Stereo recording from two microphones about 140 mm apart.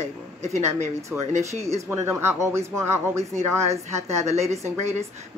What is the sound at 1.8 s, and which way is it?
Speech, 20° right (ahead or behind).